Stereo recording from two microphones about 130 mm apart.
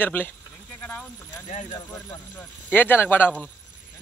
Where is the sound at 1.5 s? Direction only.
65° left (ahead or behind).